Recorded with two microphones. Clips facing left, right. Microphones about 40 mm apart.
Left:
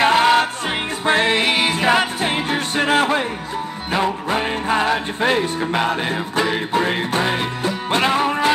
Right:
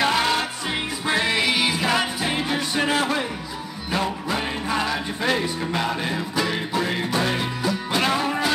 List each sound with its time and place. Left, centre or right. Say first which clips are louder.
0.0 s music: left 7 dB; left